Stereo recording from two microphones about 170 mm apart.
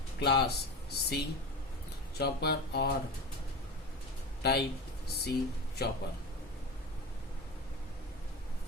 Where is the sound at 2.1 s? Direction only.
70° left (ahead or behind).